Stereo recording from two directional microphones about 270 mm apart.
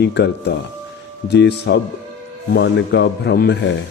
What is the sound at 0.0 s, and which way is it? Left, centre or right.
Speech, left.